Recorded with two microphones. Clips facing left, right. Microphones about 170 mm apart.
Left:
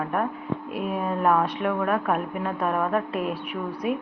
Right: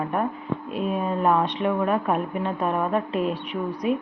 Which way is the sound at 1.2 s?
20° right (ahead or behind).